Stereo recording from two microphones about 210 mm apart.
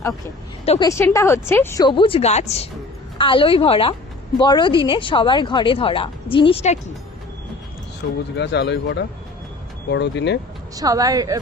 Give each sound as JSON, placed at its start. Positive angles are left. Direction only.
{"t": 0.6, "sound": "a woman's voice", "side_deg": 30}
{"t": 0.9, "sound": "speech", "side_deg": 15}
{"t": 8.0, "sound": "speech", "side_deg": 55}
{"t": 10.8, "sound": "a woman's voice", "side_deg": -15}